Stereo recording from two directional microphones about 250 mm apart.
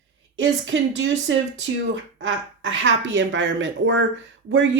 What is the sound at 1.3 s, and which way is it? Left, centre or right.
Speech, right.